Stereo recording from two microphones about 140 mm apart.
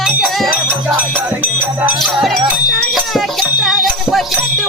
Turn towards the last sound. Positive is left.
turn(degrees=0)  # may be behind; listen again after turning